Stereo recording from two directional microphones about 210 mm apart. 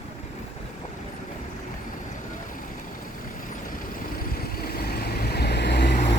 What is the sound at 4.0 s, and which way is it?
Vehicle, 45° left (ahead or behind).